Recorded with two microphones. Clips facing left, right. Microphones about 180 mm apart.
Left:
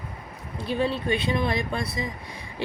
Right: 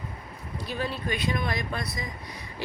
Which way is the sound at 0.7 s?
25° left (ahead or behind).